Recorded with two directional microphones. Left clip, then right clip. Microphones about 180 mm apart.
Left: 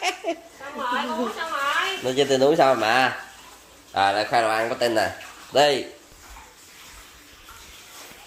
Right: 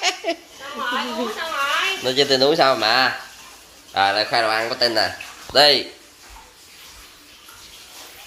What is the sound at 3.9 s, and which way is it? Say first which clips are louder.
Speech: right 2 dB; 15° left (ahead or behind).